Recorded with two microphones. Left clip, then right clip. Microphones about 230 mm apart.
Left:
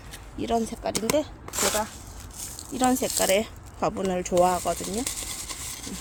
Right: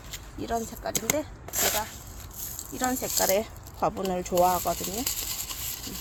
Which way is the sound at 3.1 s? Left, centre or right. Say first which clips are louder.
Left 2 dB; centre.